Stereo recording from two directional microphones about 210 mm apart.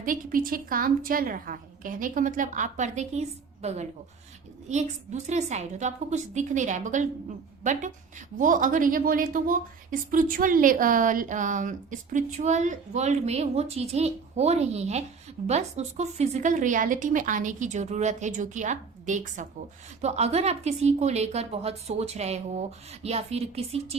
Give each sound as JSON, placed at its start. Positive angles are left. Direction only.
{"t": 0.0, "sound": "a woman's voice", "side_deg": -40}